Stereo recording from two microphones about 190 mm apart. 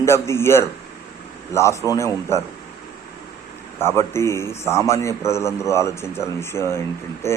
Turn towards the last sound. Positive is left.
turn(degrees=15)  # may be behind; listen again after turning